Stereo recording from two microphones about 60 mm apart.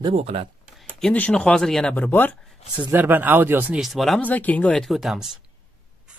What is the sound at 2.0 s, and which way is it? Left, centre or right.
Speech, left.